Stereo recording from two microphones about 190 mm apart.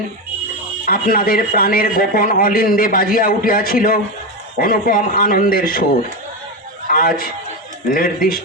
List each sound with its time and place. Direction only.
0.9 s a man's voice: 50° left (ahead or behind)
6.9 s a man's voice: 50° left (ahead or behind)